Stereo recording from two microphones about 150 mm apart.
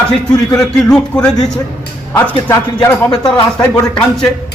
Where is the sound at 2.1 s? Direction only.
25° left (ahead or behind).